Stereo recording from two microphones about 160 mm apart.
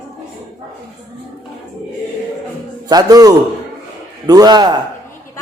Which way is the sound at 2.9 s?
25° right (ahead or behind).